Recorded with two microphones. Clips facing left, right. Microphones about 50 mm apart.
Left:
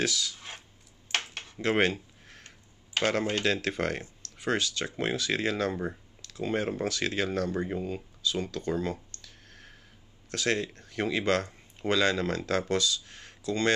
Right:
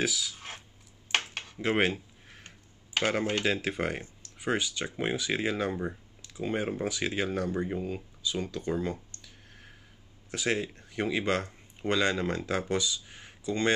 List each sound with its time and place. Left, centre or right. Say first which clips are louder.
0.0 s speech: left 1 dB; centre
1.4 s a sound: left 3 dB; centre
3.0 s speech: left 1 dB; centre
7.8 s clicking: left 2 dB; centre
10.3 s speech: left 1 dB; centre